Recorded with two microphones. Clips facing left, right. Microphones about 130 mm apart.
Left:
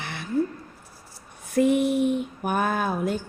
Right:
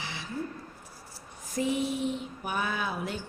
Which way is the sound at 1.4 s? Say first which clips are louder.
Left 9 dB; 60° left (ahead or behind).